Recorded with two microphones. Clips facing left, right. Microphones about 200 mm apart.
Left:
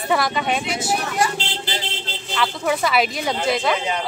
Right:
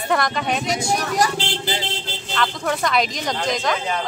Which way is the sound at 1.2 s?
40° right (ahead or behind).